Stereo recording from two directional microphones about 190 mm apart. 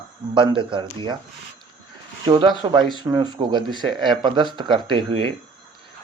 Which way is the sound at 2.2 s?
25° right (ahead or behind).